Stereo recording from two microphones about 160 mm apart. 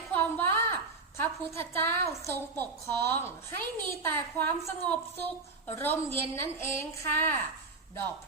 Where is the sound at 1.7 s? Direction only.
15° left (ahead or behind).